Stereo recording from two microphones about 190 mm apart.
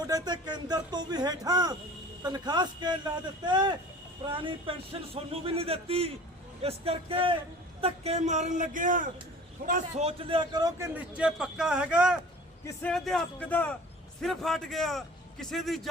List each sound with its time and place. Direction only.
0.0 s speech: 20° right (ahead or behind)
4.3 s a man's voice: 25° right (ahead or behind); by 12.1 s 5° right (ahead or behind)
12.6 s a man's voice: 5° left (ahead or behind)